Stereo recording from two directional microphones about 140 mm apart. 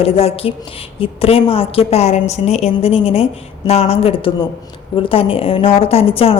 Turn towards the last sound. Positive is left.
turn(degrees=45)  # may be behind; listen again after turning